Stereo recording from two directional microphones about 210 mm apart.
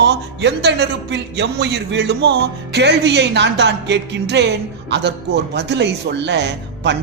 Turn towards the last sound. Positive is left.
turn(degrees=-55)  # may be behind; listen again after turning